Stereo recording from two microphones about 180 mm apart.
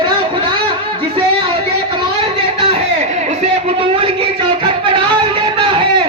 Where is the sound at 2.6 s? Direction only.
35° right (ahead or behind).